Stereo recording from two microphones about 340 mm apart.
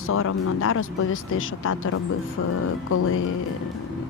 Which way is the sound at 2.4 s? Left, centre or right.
Left.